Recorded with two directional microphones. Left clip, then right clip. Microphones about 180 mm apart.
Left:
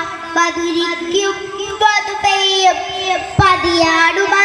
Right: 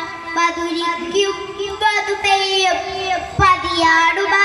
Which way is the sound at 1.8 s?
30° left (ahead or behind).